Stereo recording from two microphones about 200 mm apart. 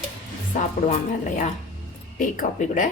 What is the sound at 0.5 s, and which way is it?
Speech, 40° left (ahead or behind).